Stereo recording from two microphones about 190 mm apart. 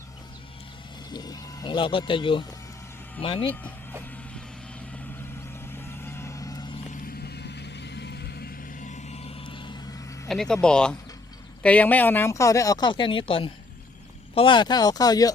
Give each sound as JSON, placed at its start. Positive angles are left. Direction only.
{"t": 1.1, "sound": "speech", "side_deg": 20}
{"t": 5.5, "sound": "vehicle", "side_deg": 10}
{"t": 7.0, "sound": "vehicle", "side_deg": 55}
{"t": 10.2, "sound": "speech", "side_deg": 5}